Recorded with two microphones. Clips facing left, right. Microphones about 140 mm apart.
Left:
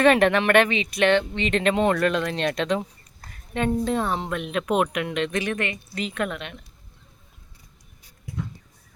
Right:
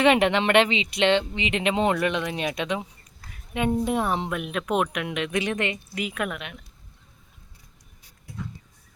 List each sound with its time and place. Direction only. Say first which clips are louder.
0.0 s speech: left 2 dB; 15° right (ahead or behind)